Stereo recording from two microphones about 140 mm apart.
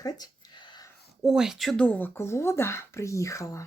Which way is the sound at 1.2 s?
5° right (ahead or behind).